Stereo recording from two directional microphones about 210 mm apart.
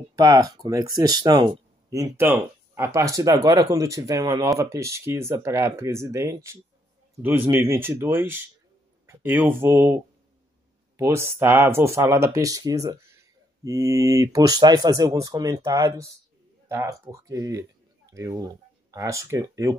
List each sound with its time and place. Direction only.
0.1 s speech: 20° right (ahead or behind)